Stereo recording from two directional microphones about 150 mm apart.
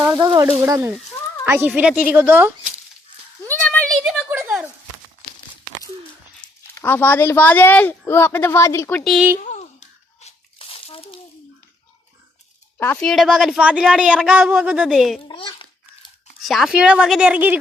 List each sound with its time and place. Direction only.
0.6 s speech: 15° right (ahead or behind)
3.4 s a sound: 10° left (ahead or behind)
4.3 s a sound: 10° right (ahead or behind)
6.7 s speech: 15° left (ahead or behind)
9.4 s crumpling: 50° left (ahead or behind)
12.8 s speech: 15° left (ahead or behind)
13.1 s speech: centre (ahead or behind)
15.3 s a sound: 35° left (ahead or behind)
16.4 s speech: centre (ahead or behind)